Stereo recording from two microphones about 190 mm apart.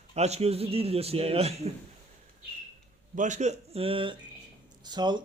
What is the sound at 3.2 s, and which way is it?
A man's voice, 40° right (ahead or behind).